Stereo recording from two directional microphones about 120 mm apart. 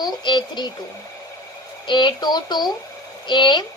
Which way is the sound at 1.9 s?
40° left (ahead or behind).